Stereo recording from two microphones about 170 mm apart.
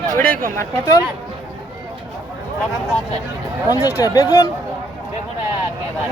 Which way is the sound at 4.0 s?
20° left (ahead or behind).